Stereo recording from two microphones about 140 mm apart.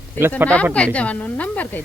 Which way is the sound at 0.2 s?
15° right (ahead or behind).